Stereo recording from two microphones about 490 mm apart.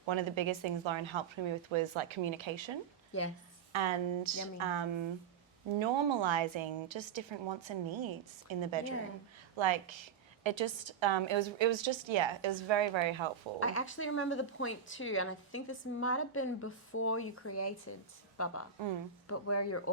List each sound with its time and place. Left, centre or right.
0.0 s speech: right
3.1 s a woman's voice: left
3.7 s a woman's voice: right
13.6 s a woman's voice: left